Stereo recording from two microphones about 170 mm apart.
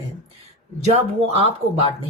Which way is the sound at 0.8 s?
40° right (ahead or behind).